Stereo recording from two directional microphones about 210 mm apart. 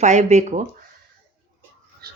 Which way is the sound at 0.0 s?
35° right (ahead or behind).